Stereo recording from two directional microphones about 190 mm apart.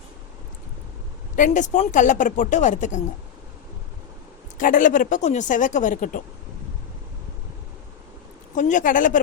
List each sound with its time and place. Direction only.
1.4 s speech: 40° left (ahead or behind)
4.5 s speech: 45° left (ahead or behind)
8.5 s speech: 40° left (ahead or behind)